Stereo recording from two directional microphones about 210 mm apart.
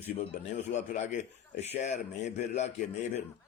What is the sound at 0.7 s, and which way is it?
A man's voice, 35° left (ahead or behind).